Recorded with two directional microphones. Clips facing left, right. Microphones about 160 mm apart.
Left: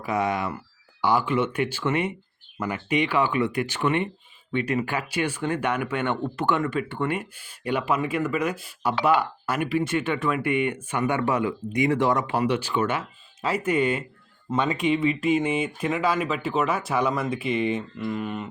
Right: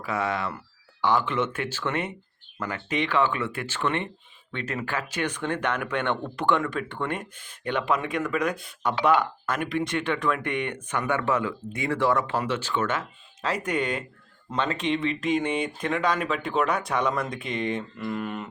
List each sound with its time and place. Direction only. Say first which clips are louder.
0.0 s speech: left 3 dB; 15° left (ahead or behind)